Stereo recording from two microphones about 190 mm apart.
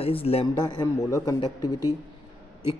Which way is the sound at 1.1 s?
20° left (ahead or behind).